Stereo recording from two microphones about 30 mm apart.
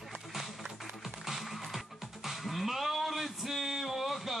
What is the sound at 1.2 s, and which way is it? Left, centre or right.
Music, centre.